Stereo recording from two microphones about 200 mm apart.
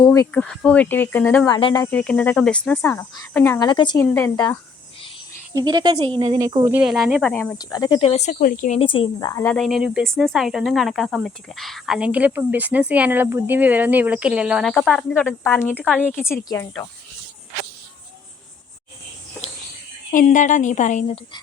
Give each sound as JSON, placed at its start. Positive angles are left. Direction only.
{"t": 0.0, "sound": "speech", "side_deg": 15}
{"t": 0.4, "sound": "speech", "side_deg": 5}
{"t": 1.5, "sound": "speech", "side_deg": 20}
{"t": 1.9, "sound": "speech", "side_deg": 5}
{"t": 4.0, "sound": "speech", "side_deg": 10}
{"t": 5.5, "sound": "speech", "side_deg": -20}
{"t": 6.7, "sound": "speech", "side_deg": 0}
{"t": 7.6, "sound": "speech", "side_deg": 20}
{"t": 9.6, "sound": "speech", "side_deg": 0}
{"t": 20.1, "sound": "a woman's voice", "side_deg": 40}